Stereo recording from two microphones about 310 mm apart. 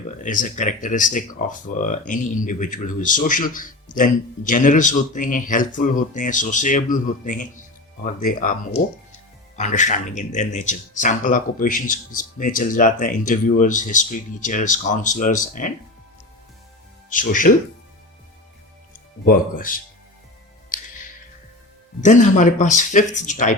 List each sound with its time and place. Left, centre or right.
0.2 s speech: left
17.1 s speech: left
19.2 s speech: left
22.0 s speech: left